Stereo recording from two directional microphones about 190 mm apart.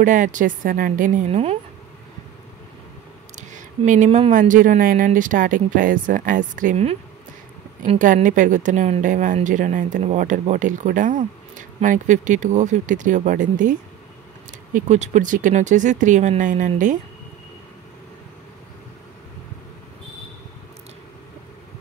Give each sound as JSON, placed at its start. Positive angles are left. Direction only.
{"t": 0.0, "sound": "speech", "side_deg": -45}
{"t": 3.3, "sound": "speech", "side_deg": -40}